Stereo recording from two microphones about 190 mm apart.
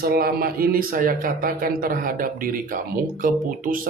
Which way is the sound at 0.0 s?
50° right (ahead or behind).